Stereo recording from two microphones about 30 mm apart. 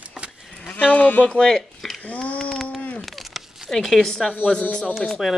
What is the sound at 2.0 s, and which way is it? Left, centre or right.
Speech, left.